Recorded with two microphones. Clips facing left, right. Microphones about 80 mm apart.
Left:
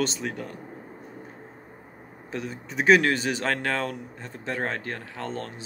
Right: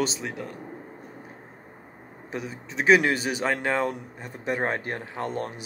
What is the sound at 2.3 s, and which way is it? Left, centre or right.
A man's voice, centre.